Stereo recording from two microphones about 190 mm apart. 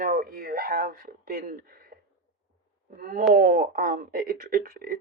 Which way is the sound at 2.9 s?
50° right (ahead or behind).